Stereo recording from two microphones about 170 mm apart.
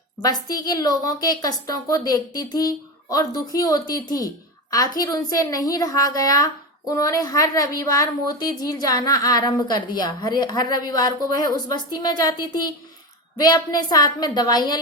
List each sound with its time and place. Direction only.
0.2 s a woman's voice: 20° left (ahead or behind)